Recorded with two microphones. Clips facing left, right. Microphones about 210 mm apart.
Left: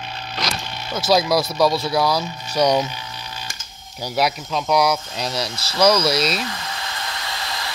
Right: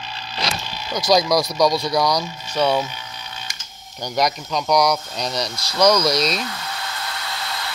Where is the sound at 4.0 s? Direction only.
5° left (ahead or behind).